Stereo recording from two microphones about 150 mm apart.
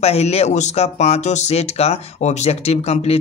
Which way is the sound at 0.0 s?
45° left (ahead or behind).